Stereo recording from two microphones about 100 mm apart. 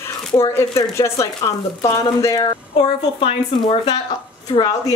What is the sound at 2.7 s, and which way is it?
A woman's voice, 60° left (ahead or behind).